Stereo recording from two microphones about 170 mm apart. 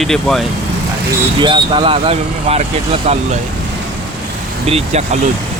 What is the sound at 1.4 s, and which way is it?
Speech, 30° right (ahead or behind).